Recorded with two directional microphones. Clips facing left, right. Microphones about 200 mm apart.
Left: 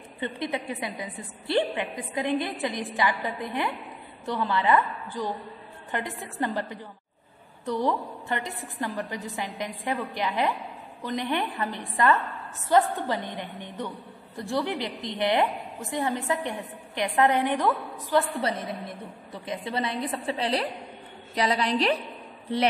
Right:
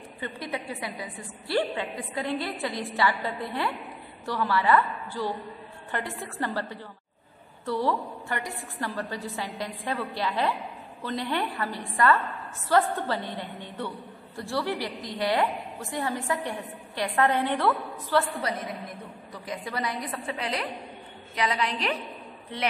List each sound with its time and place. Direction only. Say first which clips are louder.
0.2 s a woman's voice: left 4 dB; 20° left (ahead or behind)
19.3 s a woman's voice: left 3 dB; 25° left (ahead or behind)